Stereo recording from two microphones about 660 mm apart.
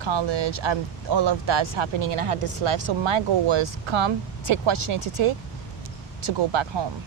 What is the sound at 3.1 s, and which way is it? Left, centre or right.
Speech, right.